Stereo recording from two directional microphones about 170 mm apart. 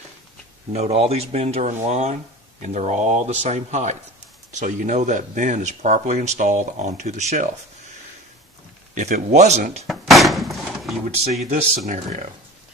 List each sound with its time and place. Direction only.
0.7 s speech: 35° right (ahead or behind)
8.9 s speech: 45° right (ahead or behind)
9.8 s door: centre (ahead or behind)
11.4 s speech: 40° right (ahead or behind)